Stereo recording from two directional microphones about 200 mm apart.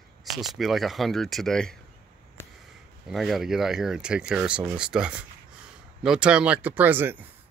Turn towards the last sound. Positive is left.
turn(degrees=-10)  # may be behind; listen again after turning